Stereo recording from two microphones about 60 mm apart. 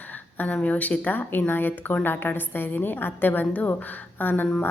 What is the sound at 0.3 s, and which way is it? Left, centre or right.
A woman's voice, left.